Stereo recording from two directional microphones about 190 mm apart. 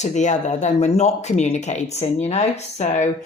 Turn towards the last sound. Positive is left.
turn(degrees=35)  # may be behind; listen again after turning